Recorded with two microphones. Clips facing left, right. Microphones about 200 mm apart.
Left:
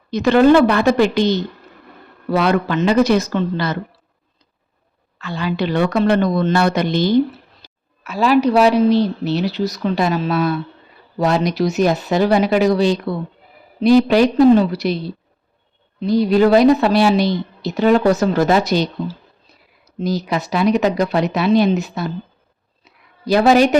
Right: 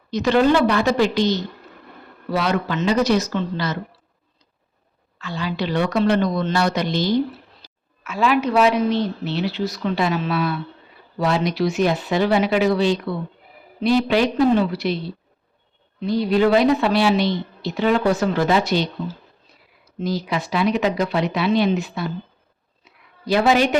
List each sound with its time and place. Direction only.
0.1 s speech: 55° left (ahead or behind)
5.2 s speech: 55° left (ahead or behind)
7.6 s a sound: 55° left (ahead or behind)
8.0 s speech: 35° left (ahead or behind)
16.0 s speech: 40° left (ahead or behind)
20.0 s speech: 40° left (ahead or behind)
22.8 s a sound: 40° left (ahead or behind)